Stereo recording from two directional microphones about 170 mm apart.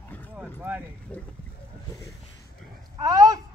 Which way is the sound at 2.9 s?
20° right (ahead or behind).